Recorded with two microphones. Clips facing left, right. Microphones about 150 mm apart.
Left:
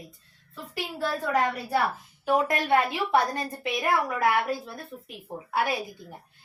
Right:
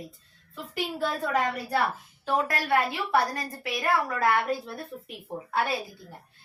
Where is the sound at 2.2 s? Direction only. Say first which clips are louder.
Left 3 dB; 20° left (ahead or behind).